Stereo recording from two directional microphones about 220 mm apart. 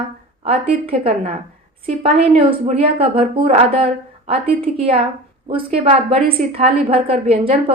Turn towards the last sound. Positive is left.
turn(degrees=-25)  # may be behind; listen again after turning